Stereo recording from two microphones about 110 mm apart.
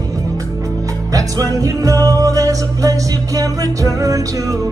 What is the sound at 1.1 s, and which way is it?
Music, 30° right (ahead or behind).